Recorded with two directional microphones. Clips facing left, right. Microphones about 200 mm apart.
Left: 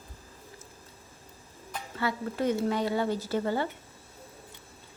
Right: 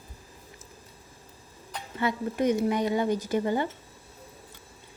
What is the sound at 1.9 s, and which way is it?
A woman's voice, 20° right (ahead or behind).